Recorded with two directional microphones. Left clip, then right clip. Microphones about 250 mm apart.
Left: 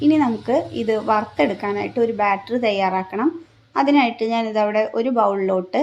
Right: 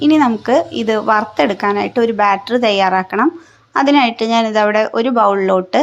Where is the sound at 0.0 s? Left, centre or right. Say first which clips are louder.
Right 5 dB; centre.